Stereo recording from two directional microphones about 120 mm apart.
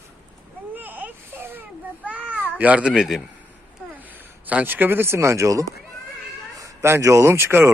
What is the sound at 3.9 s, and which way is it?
A man's voice, 15° right (ahead or behind).